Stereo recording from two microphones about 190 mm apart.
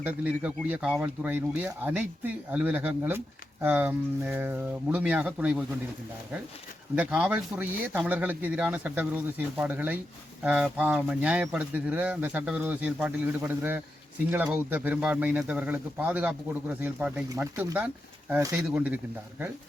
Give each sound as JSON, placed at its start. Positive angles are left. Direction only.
{"t": 0.0, "sound": "speech", "side_deg": -10}
{"t": 6.9, "sound": "speech", "side_deg": -5}